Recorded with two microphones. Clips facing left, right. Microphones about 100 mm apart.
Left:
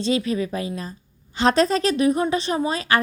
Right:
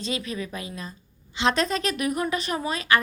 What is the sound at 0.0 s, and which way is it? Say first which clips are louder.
A woman's voice: left 8 dB; 30° left (ahead or behind).